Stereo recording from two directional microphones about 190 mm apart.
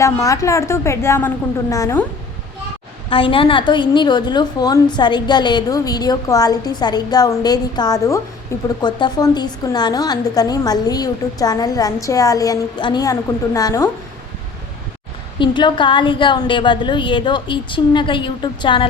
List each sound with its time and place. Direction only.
0.0 s speech: 15° left (ahead or behind)
3.1 s a woman's voice: 30° left (ahead or behind)
15.4 s a woman's voice: 25° left (ahead or behind)